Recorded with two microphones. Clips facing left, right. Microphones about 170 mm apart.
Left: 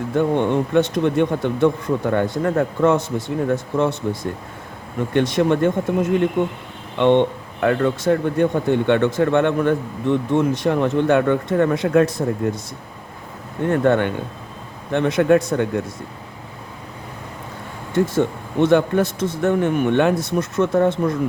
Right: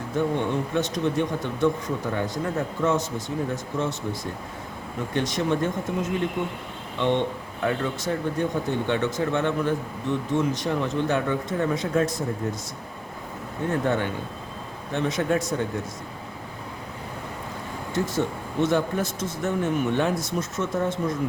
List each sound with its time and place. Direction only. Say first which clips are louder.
0.2 s speech: left 6 dB; 60° left (ahead or behind)
13.7 s speech: left 8 dB; 60° left (ahead or behind)
17.9 s speech: left 7 dB; 55° left (ahead or behind)